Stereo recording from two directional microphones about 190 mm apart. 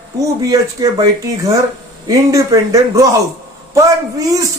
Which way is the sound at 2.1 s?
15° right (ahead or behind).